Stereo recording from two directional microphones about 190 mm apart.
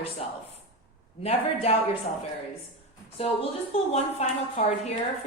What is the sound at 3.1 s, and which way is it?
A woman's voice, 30° left (ahead or behind).